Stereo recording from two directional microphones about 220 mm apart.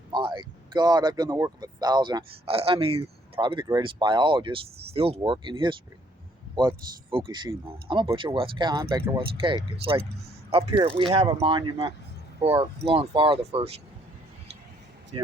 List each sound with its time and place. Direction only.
0.1 s speech: 20° right (ahead or behind)
10.7 s speech: 20° right (ahead or behind)